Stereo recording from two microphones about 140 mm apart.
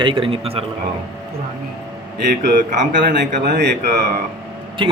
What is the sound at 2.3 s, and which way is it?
Speech, 65° right (ahead or behind).